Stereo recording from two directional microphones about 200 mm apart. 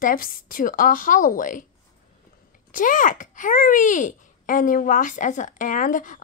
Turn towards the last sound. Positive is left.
turn(degrees=40)  # may be behind; listen again after turning